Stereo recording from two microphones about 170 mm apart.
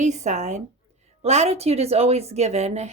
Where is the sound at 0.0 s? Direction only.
45° right (ahead or behind).